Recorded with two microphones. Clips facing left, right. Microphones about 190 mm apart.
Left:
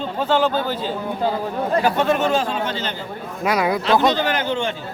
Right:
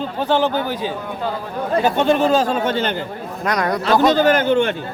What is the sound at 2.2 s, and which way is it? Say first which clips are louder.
Speech: right 4 dB; 40° right (ahead or behind).